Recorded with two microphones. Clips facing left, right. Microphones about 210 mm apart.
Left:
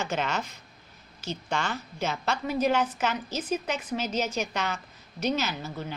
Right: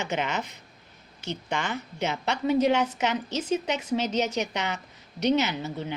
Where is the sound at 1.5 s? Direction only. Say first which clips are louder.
Even; 15° right (ahead or behind).